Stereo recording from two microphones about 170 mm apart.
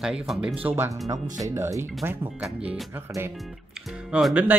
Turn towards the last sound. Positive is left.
turn(degrees=-5)  # may be behind; listen again after turning